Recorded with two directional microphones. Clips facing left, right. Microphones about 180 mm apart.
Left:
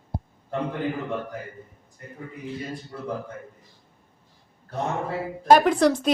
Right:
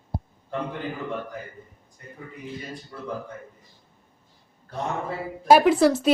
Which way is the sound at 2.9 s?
30° left (ahead or behind).